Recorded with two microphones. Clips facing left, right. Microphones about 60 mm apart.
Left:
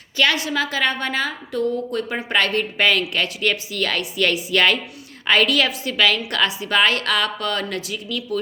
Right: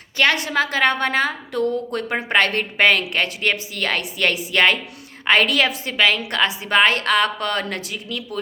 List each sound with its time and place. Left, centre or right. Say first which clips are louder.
0.2 s a woman's voice: right 1 dB; right